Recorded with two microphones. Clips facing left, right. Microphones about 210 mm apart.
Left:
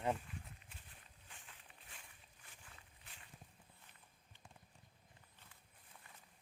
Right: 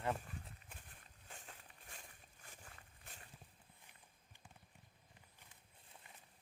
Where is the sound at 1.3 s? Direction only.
45° right (ahead or behind).